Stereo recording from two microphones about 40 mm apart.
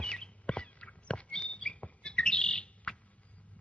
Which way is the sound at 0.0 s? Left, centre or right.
Left.